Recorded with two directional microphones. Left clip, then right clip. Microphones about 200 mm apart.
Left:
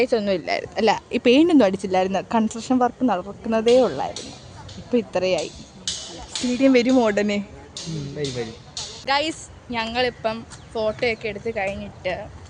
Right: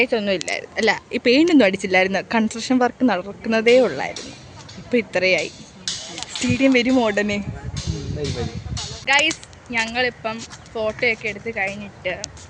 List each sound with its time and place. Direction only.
0.0 s speech: 5° left (ahead or behind)
0.4 s speech: 15° left (ahead or behind)
6.6 s speech: 5° left (ahead or behind)
9.0 s speech: 10° left (ahead or behind)